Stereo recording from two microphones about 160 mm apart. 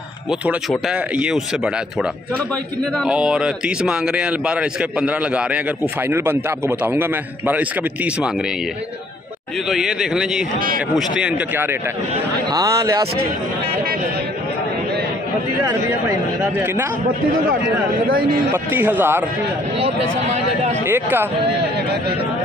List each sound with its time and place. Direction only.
0.3 s a man's voice: 5° right (ahead or behind)
9.7 s a man's voice: 5° right (ahead or behind); by 13.0 s 20° right (ahead or behind)
16.5 s a man's voice: 15° right (ahead or behind)
18.5 s a man's voice: 10° right (ahead or behind)
20.8 s a man's voice: 15° right (ahead or behind)